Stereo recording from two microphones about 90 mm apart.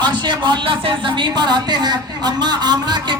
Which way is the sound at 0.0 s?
55° right (ahead or behind).